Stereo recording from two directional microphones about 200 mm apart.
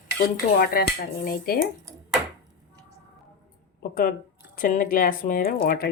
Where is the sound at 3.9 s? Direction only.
45° left (ahead or behind).